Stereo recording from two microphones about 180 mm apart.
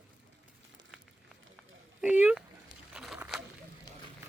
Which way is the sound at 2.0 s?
5° right (ahead or behind).